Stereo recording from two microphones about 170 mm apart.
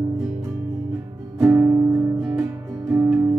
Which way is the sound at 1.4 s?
10° right (ahead or behind).